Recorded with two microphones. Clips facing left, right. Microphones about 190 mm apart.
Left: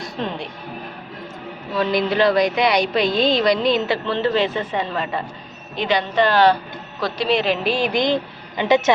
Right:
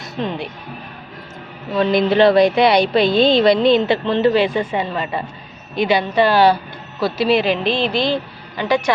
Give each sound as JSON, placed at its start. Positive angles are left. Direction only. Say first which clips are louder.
{"t": 0.0, "sound": "speech", "louder": "right 2 dB", "side_deg": 0}
{"t": 1.7, "sound": "a woman's voice", "louder": "right 4 dB", "side_deg": -25}